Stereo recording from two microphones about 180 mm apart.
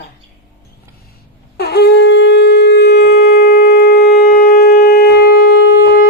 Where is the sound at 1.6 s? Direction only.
65° left (ahead or behind).